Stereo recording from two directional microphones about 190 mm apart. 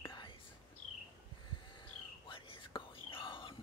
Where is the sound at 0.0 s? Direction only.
25° left (ahead or behind).